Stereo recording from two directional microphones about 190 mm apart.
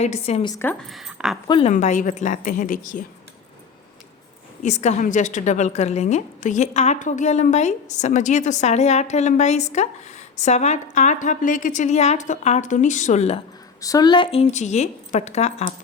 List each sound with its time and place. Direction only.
0.0 s a woman's voice: 35° left (ahead or behind)
0.4 s speech: 15° left (ahead or behind)
0.9 s speech: centre (ahead or behind)
1.5 s a woman's voice: 30° left (ahead or behind)
1.7 s a woman's voice: 40° left (ahead or behind)
4.6 s a woman's voice: 35° left (ahead or behind)
13.8 s a woman's voice: 20° left (ahead or behind)